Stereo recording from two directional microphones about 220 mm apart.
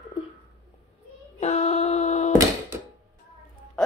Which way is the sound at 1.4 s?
30° left (ahead or behind).